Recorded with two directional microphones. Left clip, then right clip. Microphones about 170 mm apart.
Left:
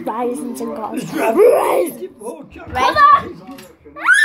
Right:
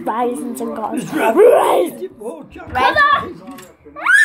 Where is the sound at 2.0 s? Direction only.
60° right (ahead or behind).